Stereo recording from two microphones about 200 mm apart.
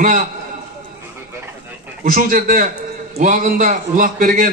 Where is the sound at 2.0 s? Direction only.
45° right (ahead or behind).